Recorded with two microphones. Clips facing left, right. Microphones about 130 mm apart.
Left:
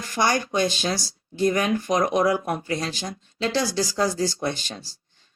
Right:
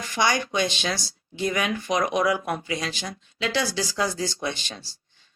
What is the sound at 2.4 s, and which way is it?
Speech, 20° left (ahead or behind).